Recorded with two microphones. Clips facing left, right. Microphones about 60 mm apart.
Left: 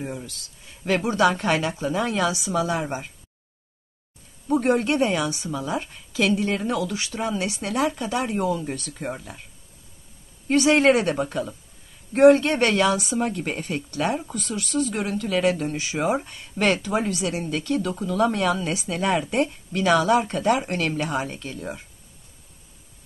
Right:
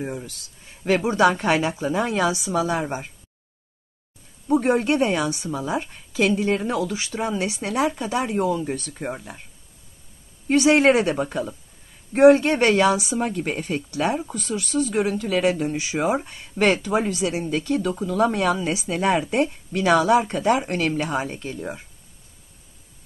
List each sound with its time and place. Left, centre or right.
0.0 s speech: centre
4.8 s speech: centre
9.0 s speech: centre
10.5 s speech: centre
15.6 s speech: centre
21.4 s speech: right